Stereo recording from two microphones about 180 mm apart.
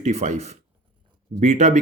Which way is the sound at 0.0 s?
40° right (ahead or behind).